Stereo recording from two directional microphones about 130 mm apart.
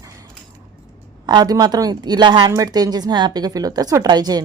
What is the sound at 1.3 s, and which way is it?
A woman's voice, 30° right (ahead or behind).